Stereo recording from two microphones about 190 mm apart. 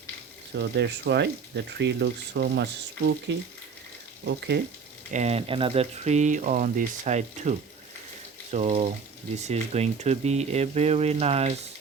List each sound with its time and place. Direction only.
0.5 s speech: 65° right (ahead or behind)
5.1 s speech: 35° right (ahead or behind)
8.5 s speech: 35° right (ahead or behind)